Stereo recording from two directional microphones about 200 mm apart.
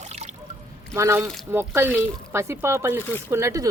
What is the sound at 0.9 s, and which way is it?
Speech, 15° right (ahead or behind).